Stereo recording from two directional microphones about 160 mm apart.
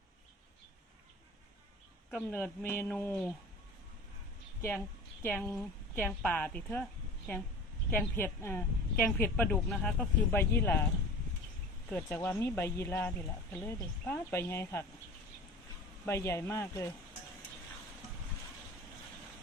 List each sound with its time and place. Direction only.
2.0 s speech: 10° left (ahead or behind)
5.2 s speech: 15° left (ahead or behind)
7.9 s speech: 15° left (ahead or behind)
11.9 s speech: 15° left (ahead or behind)
16.0 s speech: 15° left (ahead or behind)